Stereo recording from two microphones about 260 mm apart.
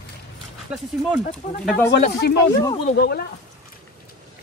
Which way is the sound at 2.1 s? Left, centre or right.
Left.